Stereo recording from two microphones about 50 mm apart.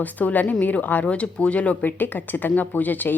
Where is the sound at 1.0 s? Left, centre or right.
Left.